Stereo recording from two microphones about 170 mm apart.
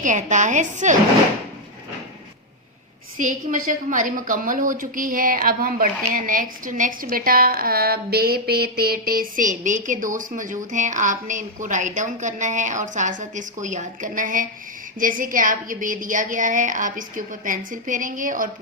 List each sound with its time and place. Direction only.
0.0 s a woman's voice: 45° right (ahead or behind)
3.2 s a woman's voice: 50° right (ahead or behind)